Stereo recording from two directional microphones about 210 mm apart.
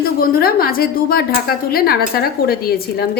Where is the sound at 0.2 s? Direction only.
45° left (ahead or behind).